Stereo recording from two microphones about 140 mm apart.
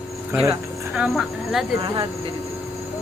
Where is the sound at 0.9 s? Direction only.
Centre (ahead or behind).